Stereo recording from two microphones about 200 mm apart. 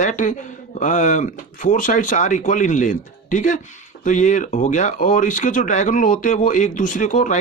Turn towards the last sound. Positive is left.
turn(degrees=40)  # may be behind; listen again after turning